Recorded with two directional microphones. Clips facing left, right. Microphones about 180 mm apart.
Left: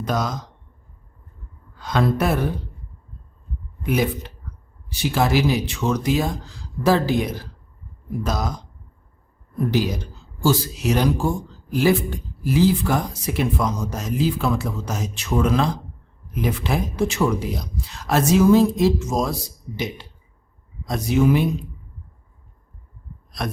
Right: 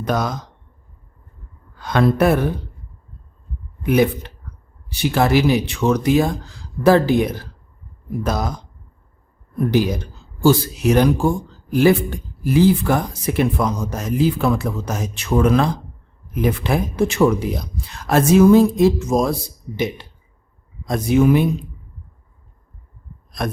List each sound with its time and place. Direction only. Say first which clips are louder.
0.0 s speech: right 3 dB; 60° right (ahead or behind)
1.8 s speech: right 5 dB; 60° right (ahead or behind)
3.8 s speech: right 6 dB; 60° right (ahead or behind)
9.7 s speech: right 5 dB; 55° right (ahead or behind)